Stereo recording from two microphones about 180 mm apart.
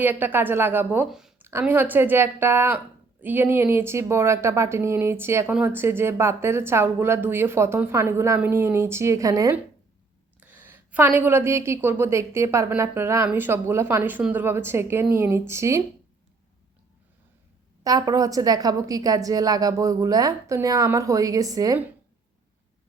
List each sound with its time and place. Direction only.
0.0 s a woman's voice: 10° right (ahead or behind)
17.8 s a woman's voice: 20° right (ahead or behind)